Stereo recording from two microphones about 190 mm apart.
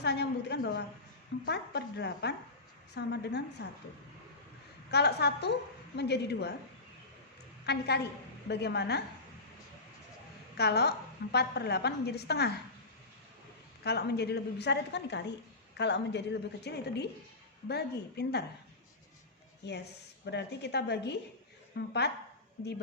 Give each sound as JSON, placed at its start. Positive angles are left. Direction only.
{"t": 0.0, "sound": "a sound", "side_deg": 60}
{"t": 1.5, "sound": "a woman's voice", "side_deg": 60}
{"t": 4.9, "sound": "a woman's voice", "side_deg": 60}
{"t": 7.6, "sound": "a woman's voice", "side_deg": 60}
{"t": 10.6, "sound": "a woman's voice", "side_deg": 60}
{"t": 13.8, "sound": "a woman's voice", "side_deg": 60}
{"t": 19.6, "sound": "a woman's voice", "side_deg": 60}